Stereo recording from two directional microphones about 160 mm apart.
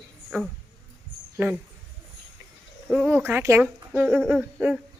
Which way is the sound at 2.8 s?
Centre (ahead or behind).